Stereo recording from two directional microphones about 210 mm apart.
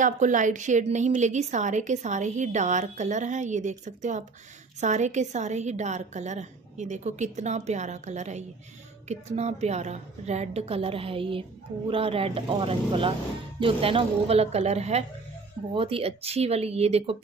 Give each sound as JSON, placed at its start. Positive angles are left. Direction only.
{"t": 0.0, "sound": "a woman's voice", "side_deg": -35}